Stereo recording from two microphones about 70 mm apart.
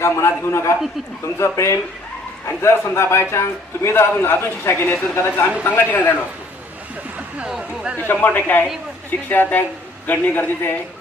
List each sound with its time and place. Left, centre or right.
0.0 s a man's voice: left
7.5 s speech: centre
7.9 s speech: left